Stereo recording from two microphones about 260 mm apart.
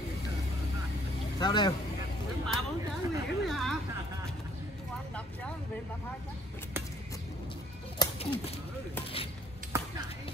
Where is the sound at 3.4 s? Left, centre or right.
Centre.